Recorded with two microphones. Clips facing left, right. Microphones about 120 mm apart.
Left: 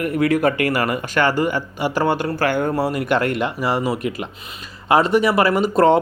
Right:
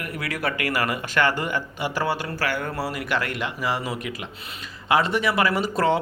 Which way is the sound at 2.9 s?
50° left (ahead or behind).